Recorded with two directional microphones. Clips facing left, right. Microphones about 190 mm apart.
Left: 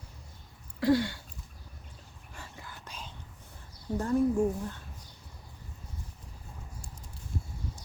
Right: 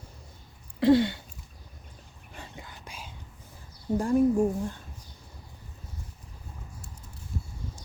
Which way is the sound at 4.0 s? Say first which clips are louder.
Right 4 dB; 15° right (ahead or behind).